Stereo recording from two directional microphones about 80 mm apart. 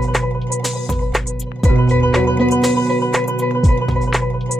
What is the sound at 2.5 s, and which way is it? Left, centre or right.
Music, centre.